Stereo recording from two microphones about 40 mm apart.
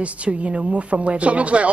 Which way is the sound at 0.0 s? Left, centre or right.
Right.